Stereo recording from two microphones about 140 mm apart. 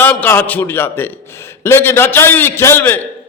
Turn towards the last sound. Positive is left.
turn(degrees=15)  # may be behind; listen again after turning